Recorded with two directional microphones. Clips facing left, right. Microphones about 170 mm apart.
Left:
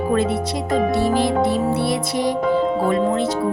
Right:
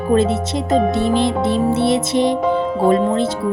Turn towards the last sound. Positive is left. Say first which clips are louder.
# right 3 dB
turn(degrees=-30)  # may be behind; listen again after turning